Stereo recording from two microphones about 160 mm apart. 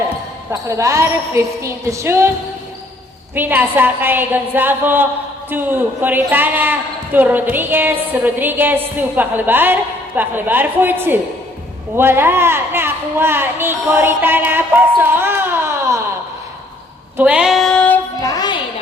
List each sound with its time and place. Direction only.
0.5 s a woman's voice: 20° right (ahead or behind)
3.3 s speech: 10° right (ahead or behind)
17.2 s female singing: 10° right (ahead or behind); by 18.0 s 10° left (ahead or behind)
18.2 s music: 25° left (ahead or behind)